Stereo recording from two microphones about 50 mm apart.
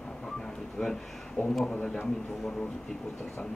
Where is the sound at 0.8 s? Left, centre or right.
Centre.